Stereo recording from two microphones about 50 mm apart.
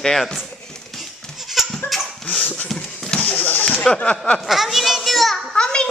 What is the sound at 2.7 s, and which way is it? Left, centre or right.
Speech, centre.